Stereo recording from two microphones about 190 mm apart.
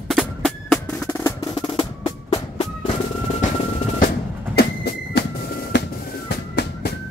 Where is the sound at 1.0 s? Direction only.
15° left (ahead or behind).